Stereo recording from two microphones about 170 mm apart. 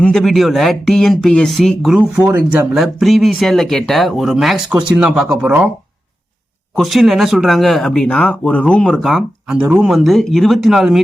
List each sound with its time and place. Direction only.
0.0 s speech: 5° left (ahead or behind)
6.7 s speech: centre (ahead or behind)